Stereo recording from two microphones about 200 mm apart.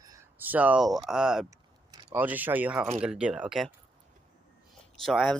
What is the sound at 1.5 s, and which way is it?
Speech, 15° right (ahead or behind).